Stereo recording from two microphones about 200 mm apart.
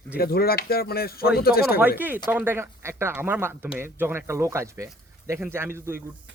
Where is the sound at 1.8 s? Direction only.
10° right (ahead or behind).